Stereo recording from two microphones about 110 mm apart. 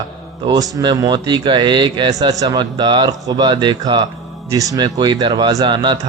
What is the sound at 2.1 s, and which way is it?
Speech, 35° right (ahead or behind).